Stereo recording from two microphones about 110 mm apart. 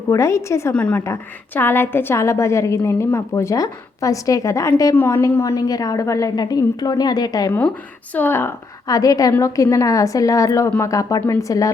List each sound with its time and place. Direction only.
0.1 s a woman's voice: 25° left (ahead or behind)
0.7 s a woman's voice: 10° left (ahead or behind)
1.0 s a woman's voice: 25° left (ahead or behind)
8.1 s a woman's voice: 20° left (ahead or behind)